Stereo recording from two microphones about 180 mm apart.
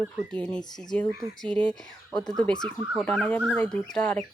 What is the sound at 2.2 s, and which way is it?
Speech, 5° left (ahead or behind).